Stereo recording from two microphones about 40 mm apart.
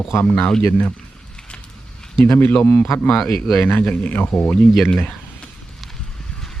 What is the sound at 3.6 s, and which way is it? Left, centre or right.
Speech, left.